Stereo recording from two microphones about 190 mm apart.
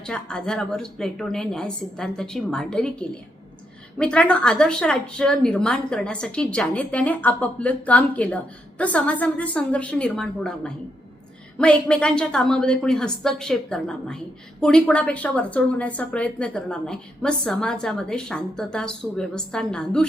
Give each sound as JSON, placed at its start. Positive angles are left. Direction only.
{"t": 0.0, "sound": "a woman's voice", "side_deg": 5}
{"t": 3.9, "sound": "a woman's voice", "side_deg": 5}